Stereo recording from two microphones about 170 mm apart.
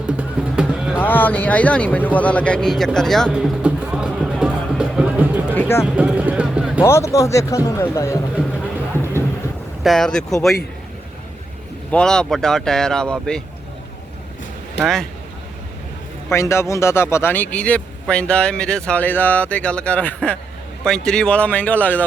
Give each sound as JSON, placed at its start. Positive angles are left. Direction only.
{"t": 0.0, "sound": "music", "side_deg": -5}
{"t": 0.9, "sound": "speech", "side_deg": 10}
{"t": 3.2, "sound": "music", "side_deg": -5}
{"t": 5.5, "sound": "music", "side_deg": 15}
{"t": 5.8, "sound": "a sound", "side_deg": -5}
{"t": 6.8, "sound": "speech", "side_deg": 15}
{"t": 9.8, "sound": "speech", "side_deg": 0}
{"t": 11.9, "sound": "speech", "side_deg": 5}
{"t": 16.3, "sound": "speech", "side_deg": 15}